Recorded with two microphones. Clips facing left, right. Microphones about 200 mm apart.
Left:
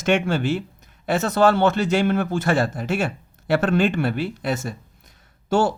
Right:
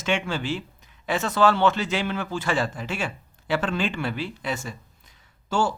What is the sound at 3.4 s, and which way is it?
Speech, 60° left (ahead or behind).